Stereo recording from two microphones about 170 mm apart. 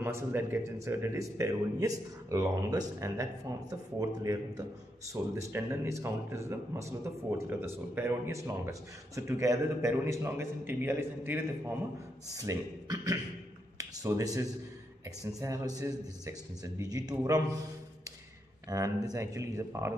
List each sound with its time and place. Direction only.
0.0 s a man's voice: 15° right (ahead or behind)
18.7 s a man's voice: 20° right (ahead or behind)